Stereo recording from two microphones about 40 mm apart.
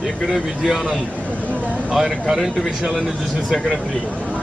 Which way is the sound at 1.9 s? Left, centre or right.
Centre.